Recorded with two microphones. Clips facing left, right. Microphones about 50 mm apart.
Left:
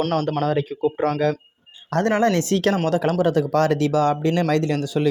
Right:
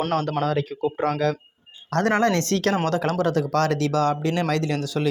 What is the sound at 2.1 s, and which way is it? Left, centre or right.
Speech, centre.